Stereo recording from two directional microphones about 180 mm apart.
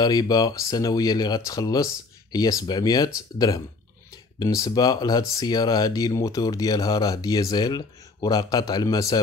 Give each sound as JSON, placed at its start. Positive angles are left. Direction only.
{"t": 0.0, "sound": "speech", "side_deg": 20}